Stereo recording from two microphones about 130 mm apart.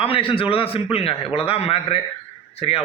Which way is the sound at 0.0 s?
45° left (ahead or behind).